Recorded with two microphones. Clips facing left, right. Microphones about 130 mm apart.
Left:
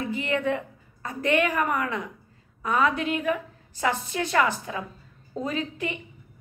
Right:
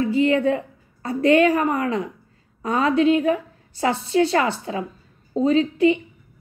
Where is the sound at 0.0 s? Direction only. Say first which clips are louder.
Right 8 dB; 30° right (ahead or behind).